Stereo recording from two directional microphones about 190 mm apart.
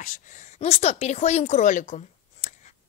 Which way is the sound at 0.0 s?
40° left (ahead or behind).